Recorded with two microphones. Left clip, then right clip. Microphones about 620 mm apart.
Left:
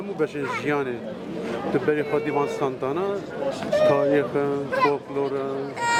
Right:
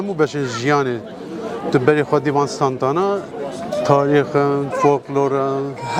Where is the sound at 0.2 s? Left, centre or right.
Right.